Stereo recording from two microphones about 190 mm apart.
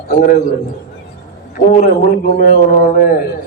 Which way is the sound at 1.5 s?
45° left (ahead or behind).